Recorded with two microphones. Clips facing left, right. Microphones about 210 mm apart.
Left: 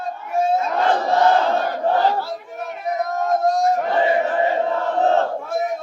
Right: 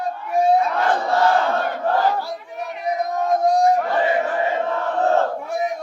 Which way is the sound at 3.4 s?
15° right (ahead or behind).